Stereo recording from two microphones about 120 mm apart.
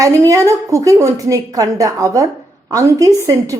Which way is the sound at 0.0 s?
25° right (ahead or behind).